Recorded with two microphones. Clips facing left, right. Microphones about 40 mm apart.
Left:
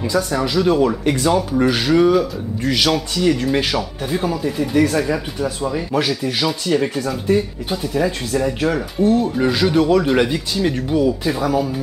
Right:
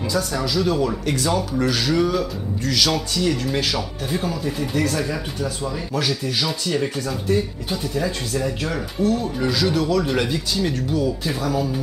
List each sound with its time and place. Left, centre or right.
0.1 s speech: centre
9.4 s speech: left